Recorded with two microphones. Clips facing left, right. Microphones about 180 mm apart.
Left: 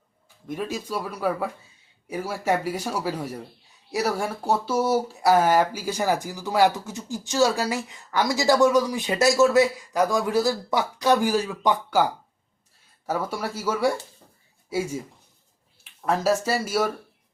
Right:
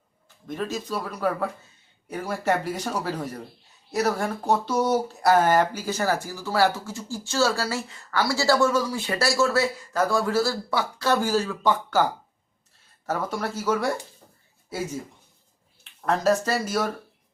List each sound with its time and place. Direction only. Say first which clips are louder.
0.4 s speech: even; 10° left (ahead or behind)
13.1 s speech: even; 10° left (ahead or behind)